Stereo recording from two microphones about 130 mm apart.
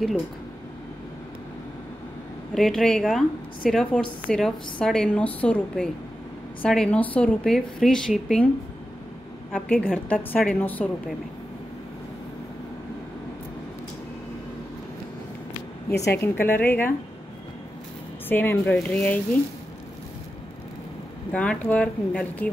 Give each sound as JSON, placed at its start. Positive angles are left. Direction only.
{"t": 2.5, "sound": "a woman's voice", "side_deg": 0}
{"t": 9.7, "sound": "a woman's voice", "side_deg": 10}
{"t": 16.0, "sound": "a woman's voice", "side_deg": 20}
{"t": 18.3, "sound": "a woman's voice", "side_deg": 15}
{"t": 21.3, "sound": "a woman's voice", "side_deg": 10}